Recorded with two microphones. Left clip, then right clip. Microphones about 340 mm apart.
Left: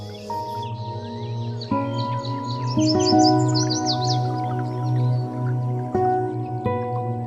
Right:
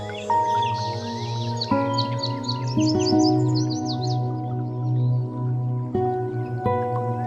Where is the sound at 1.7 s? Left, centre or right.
Centre.